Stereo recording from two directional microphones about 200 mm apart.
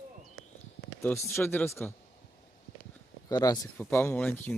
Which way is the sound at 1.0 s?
10° left (ahead or behind).